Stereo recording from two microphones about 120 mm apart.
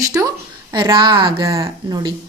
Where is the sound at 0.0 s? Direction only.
30° right (ahead or behind); by 1.5 s 45° right (ahead or behind).